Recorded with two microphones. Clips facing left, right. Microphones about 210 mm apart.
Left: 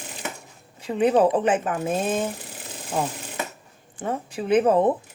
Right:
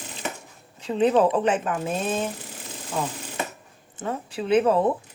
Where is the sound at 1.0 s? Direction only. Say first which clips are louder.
Left 1 dB; 15° left (ahead or behind).